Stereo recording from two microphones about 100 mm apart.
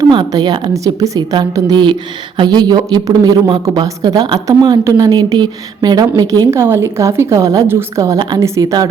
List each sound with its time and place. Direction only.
0.0 s a woman's voice: 45° right (ahead or behind)
0.7 s a woman's voice: 35° right (ahead or behind)
6.5 s a woman's voice: 25° right (ahead or behind)